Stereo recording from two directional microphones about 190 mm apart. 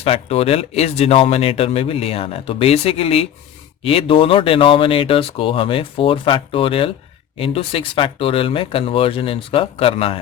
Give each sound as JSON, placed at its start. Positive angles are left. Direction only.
{"t": 0.0, "sound": "speech", "side_deg": 30}